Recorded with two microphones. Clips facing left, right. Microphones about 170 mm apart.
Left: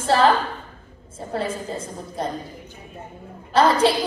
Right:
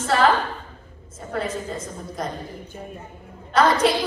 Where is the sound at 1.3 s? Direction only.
30° left (ahead or behind).